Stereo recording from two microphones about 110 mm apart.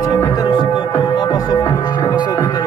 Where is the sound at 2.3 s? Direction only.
25° left (ahead or behind).